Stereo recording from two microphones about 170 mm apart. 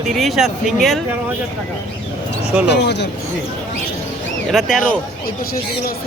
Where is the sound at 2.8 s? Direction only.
90° left.